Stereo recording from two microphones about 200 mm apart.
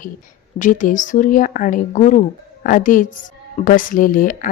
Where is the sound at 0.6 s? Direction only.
40° left (ahead or behind).